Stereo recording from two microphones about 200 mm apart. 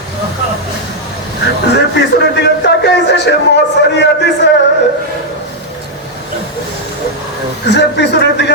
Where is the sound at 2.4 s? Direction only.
60° left (ahead or behind).